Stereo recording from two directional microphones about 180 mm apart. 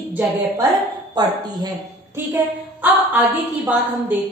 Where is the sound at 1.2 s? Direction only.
25° right (ahead or behind).